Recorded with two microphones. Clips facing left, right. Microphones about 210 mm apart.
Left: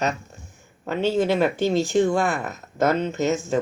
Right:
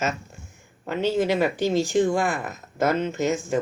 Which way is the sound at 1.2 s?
15° right (ahead or behind).